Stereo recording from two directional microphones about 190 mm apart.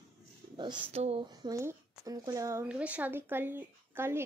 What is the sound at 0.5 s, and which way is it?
Speech, 30° right (ahead or behind).